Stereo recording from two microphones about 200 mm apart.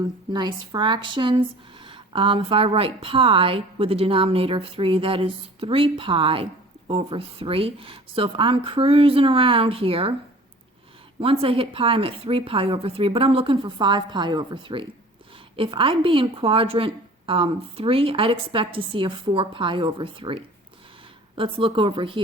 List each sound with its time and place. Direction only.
0.0 s speech: 20° right (ahead or behind)
11.2 s speech: 30° right (ahead or behind)